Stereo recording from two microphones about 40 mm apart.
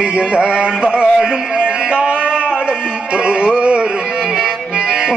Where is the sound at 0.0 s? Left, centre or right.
Right.